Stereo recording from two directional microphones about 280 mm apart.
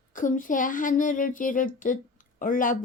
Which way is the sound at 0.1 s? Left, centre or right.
Left.